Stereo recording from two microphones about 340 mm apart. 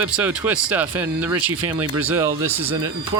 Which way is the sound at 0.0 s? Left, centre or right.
Centre.